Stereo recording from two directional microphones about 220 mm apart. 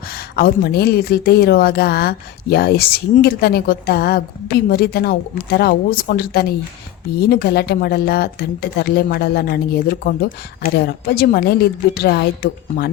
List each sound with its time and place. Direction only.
0.1 s a woman's voice: 45° left (ahead or behind)